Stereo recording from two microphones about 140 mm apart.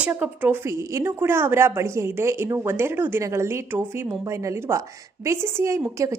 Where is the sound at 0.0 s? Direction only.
10° right (ahead or behind).